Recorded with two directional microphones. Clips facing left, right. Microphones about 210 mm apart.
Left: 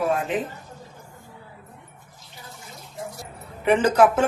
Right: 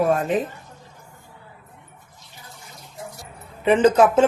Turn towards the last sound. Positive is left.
turn(degrees=-20)  # may be behind; listen again after turning